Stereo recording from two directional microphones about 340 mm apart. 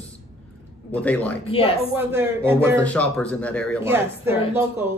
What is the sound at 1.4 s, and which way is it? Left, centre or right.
Speech, centre.